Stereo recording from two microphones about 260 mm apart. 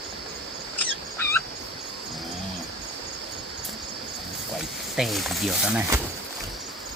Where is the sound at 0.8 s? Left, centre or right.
Centre.